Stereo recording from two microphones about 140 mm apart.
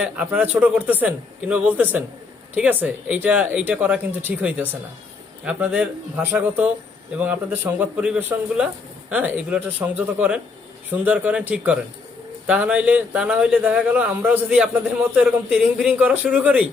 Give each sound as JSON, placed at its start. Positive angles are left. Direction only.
{"t": 0.0, "sound": "speech", "side_deg": -10}